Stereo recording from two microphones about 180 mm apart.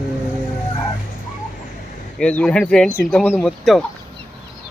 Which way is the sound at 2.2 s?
5° left (ahead or behind).